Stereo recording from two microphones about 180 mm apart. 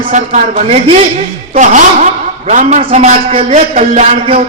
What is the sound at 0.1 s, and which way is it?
A man's voice, 45° right (ahead or behind).